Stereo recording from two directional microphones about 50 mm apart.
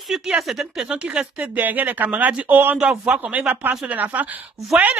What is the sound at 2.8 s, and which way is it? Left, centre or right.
Speech, centre.